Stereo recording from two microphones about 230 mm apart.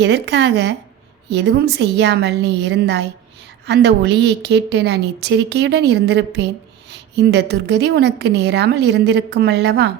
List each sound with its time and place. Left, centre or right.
0.0 s a woman's voice: right